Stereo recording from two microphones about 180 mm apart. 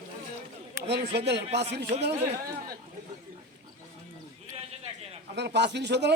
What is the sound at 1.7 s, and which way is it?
Speech, 70° right (ahead or behind).